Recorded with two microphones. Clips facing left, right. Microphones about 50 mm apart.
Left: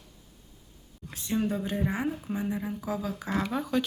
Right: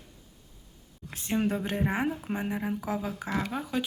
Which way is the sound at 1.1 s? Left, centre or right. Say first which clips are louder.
Right 1 dB; right.